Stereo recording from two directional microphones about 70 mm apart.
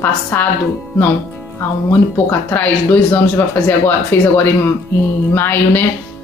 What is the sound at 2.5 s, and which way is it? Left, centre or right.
Speech, left.